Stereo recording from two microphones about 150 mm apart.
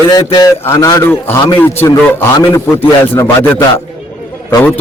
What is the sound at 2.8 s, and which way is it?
A man's voice, 15° left (ahead or behind).